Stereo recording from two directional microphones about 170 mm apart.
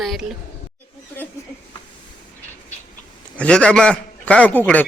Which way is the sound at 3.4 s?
5° left (ahead or behind).